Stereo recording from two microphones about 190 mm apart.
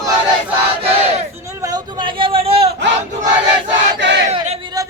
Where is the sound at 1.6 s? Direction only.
20° right (ahead or behind).